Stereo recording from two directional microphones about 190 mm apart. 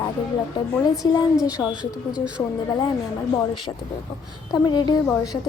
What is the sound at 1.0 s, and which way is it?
Speech, 25° left (ahead or behind).